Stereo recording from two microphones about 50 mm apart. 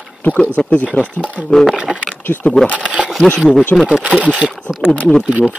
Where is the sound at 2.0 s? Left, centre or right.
Left.